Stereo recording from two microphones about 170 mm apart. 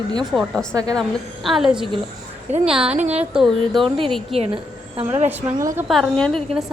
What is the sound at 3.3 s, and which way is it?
A woman's voice, centre (ahead or behind).